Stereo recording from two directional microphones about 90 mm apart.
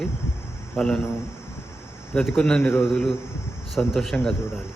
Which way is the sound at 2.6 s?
25° left (ahead or behind).